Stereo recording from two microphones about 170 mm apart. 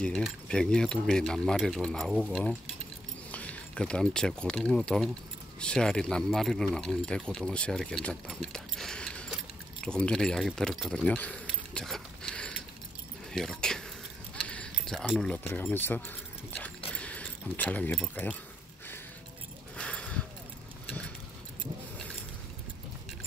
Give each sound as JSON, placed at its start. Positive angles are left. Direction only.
{"t": 0.0, "sound": "speech", "side_deg": 5}
{"t": 11.4, "sound": "a sound", "side_deg": 0}
{"t": 13.3, "sound": "speech", "side_deg": 5}
{"t": 19.8, "sound": "horse", "side_deg": 5}